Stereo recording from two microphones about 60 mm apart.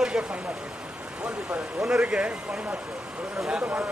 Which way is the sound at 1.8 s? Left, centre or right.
Centre.